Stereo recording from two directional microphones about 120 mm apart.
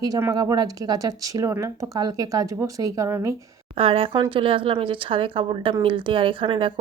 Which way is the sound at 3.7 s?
50° right (ahead or behind).